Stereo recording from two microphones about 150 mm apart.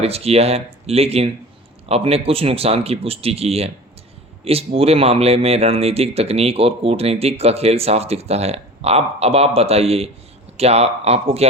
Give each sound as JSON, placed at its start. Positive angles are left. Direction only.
{"t": 0.0, "sound": "speech", "side_deg": -45}